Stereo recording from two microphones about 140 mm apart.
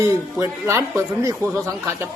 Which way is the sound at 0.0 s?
20° right (ahead or behind).